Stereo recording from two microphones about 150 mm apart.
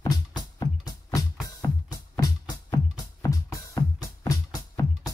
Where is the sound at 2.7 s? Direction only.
25° left (ahead or behind).